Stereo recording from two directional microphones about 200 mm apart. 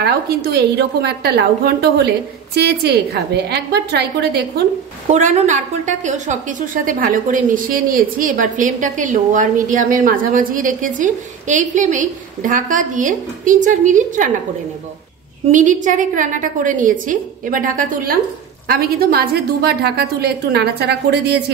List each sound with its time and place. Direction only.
0.0 s a woman's voice: 50° right (ahead or behind)
5.1 s a woman's voice: 35° right (ahead or behind)
15.5 s a woman's voice: 40° right (ahead or behind); by 21.5 s 55° right (ahead or behind)